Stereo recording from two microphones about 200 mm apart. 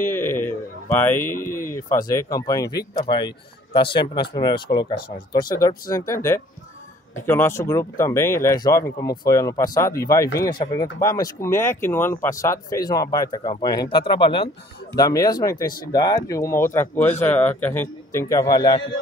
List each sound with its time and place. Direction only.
0.0 s speech: 10° left (ahead or behind)